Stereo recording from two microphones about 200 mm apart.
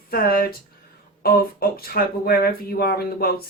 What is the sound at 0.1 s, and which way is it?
Speech, 45° left (ahead or behind).